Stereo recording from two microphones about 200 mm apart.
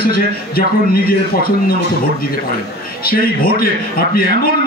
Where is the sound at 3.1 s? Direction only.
50° left (ahead or behind).